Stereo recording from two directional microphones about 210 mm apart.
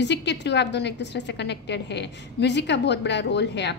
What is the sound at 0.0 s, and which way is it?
A woman's voice, 55° left (ahead or behind).